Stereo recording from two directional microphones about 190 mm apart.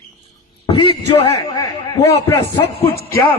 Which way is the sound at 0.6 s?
25° left (ahead or behind).